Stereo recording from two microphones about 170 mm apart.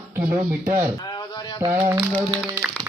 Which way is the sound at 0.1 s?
15° right (ahead or behind).